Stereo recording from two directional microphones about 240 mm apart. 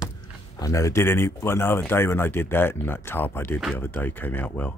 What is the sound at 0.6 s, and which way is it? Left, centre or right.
Speech, centre.